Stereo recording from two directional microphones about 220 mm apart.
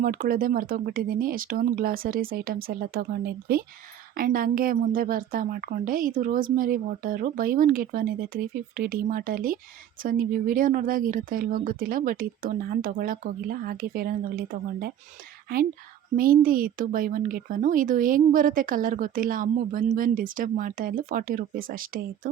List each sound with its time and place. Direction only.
0.0 s speech: 40° right (ahead or behind)
16.1 s speech: 40° right (ahead or behind)